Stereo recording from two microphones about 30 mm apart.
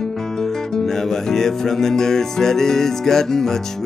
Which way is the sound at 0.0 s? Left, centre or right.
Centre.